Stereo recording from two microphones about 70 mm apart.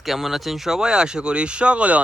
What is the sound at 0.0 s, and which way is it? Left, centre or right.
Speech, centre.